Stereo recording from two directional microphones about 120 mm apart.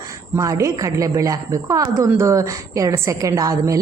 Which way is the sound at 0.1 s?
25° right (ahead or behind).